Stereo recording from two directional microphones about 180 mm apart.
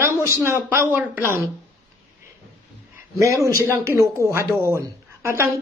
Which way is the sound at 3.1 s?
15° right (ahead or behind).